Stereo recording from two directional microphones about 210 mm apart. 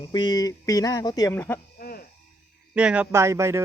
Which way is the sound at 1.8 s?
45° left (ahead or behind).